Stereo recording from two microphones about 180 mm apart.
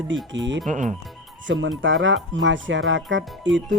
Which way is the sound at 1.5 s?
90° right.